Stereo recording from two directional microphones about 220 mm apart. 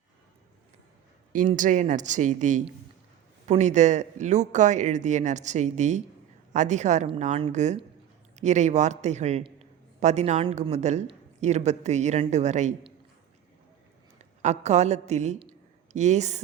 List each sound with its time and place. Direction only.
1.3 s a man's voice: 35° right (ahead or behind)
14.2 s a woman's voice: 30° right (ahead or behind)